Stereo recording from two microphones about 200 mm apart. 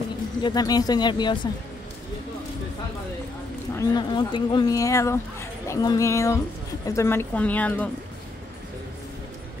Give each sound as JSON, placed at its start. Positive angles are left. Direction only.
{"t": 0.4, "sound": "speech", "side_deg": 20}
{"t": 3.7, "sound": "speech", "side_deg": 20}